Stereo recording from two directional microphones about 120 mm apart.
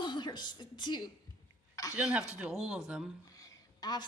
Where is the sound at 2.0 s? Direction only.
10° right (ahead or behind).